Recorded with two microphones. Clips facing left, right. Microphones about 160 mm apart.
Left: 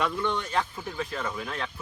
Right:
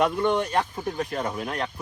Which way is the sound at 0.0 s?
45° right (ahead or behind).